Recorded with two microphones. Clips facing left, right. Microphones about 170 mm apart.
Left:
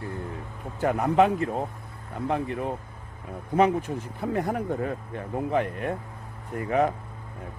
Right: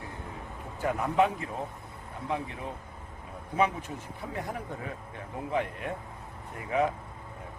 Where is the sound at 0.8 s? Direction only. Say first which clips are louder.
Left 5 dB; 55° left (ahead or behind).